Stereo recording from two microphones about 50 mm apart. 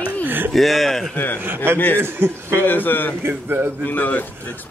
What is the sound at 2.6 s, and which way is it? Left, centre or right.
Speech, left.